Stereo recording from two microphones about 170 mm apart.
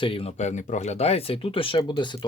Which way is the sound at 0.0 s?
35° left (ahead or behind).